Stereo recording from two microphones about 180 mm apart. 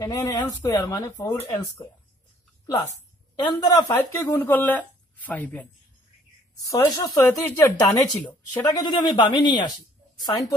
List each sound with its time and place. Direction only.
0.0 s speech: 15° left (ahead or behind)
2.6 s speech: 20° left (ahead or behind)
6.7 s speech: 20° left (ahead or behind)